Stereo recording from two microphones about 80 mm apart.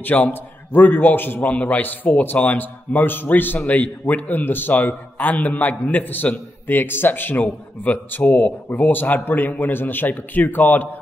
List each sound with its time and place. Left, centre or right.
0.0 s a man's voice: left